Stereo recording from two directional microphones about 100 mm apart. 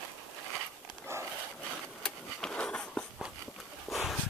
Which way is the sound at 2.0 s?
5° left (ahead or behind).